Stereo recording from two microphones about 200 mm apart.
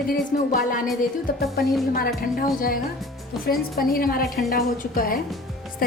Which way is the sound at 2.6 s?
45° left (ahead or behind).